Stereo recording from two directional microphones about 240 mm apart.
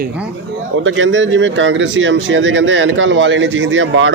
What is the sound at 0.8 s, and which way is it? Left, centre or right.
Speech, right.